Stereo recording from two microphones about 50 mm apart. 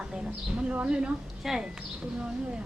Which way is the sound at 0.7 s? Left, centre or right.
Right.